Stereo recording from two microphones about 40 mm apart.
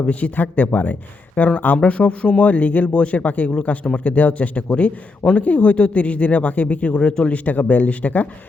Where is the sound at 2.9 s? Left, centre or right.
Left.